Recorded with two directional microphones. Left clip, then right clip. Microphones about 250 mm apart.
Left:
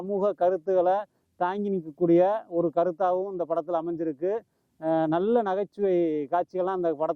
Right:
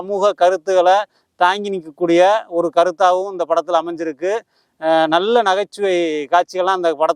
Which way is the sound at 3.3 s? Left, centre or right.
Centre.